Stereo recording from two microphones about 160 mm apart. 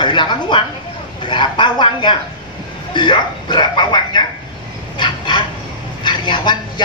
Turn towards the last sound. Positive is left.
turn(degrees=30)  # may be behind; listen again after turning